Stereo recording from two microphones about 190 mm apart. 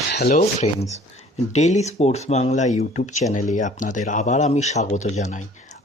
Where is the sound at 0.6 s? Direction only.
35° left (ahead or behind).